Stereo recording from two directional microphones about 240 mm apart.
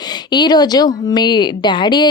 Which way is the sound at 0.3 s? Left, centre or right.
Centre.